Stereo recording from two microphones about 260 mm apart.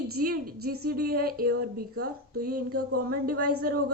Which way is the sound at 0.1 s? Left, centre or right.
Right.